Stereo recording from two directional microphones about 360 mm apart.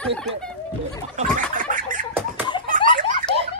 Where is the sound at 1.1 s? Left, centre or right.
Right.